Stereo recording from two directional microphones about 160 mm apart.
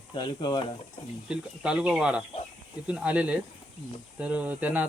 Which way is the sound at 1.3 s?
5° right (ahead or behind).